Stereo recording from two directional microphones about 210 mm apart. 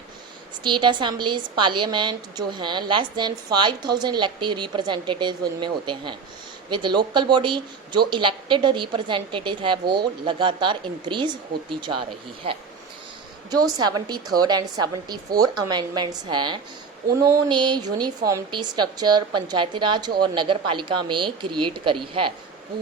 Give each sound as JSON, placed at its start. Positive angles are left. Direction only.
{"t": 0.6, "sound": "a woman's voice", "side_deg": -20}
{"t": 13.5, "sound": "a woman's voice", "side_deg": -20}